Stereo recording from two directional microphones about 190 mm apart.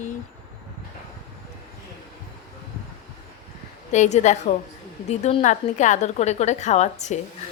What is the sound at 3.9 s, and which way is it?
A woman's voice, 35° left (ahead or behind).